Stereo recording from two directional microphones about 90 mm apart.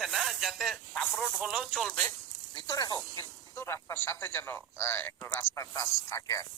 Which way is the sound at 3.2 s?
30° left (ahead or behind).